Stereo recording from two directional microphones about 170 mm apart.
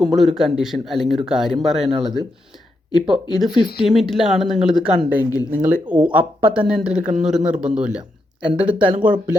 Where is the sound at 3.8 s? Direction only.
Centre (ahead or behind).